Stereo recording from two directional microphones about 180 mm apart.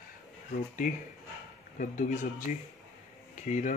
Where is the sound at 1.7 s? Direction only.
45° left (ahead or behind).